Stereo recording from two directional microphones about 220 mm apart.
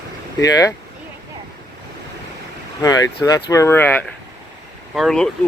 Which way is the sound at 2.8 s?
15° left (ahead or behind).